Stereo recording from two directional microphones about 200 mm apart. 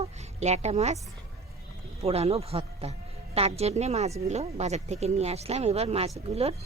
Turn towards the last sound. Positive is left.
turn(degrees=-30)  # may be behind; listen again after turning